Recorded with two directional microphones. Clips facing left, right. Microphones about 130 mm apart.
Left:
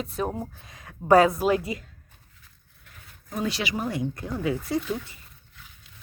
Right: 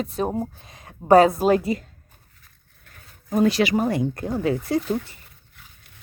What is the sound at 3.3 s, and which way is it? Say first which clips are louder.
Speech: right 10 dB; 50° right (ahead or behind).